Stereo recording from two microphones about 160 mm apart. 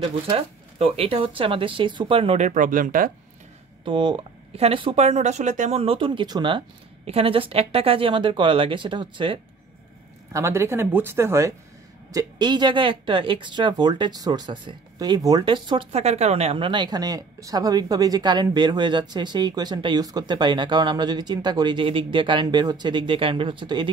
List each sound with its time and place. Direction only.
0.3 s speech: 35° right (ahead or behind); by 3.1 s 60° right (ahead or behind)
3.8 s speech: 30° right (ahead or behind)
10.3 s speech: 15° right (ahead or behind)